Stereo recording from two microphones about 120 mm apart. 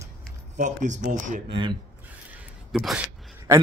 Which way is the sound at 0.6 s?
90° right.